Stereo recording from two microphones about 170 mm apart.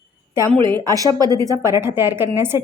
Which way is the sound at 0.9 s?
20° right (ahead or behind).